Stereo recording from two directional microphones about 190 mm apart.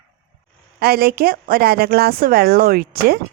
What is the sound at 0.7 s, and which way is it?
Speech, 55° right (ahead or behind).